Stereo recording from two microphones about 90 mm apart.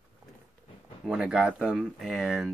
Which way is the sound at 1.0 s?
5° right (ahead or behind).